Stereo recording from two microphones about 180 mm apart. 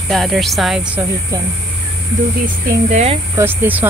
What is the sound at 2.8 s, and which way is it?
Speech, 40° right (ahead or behind).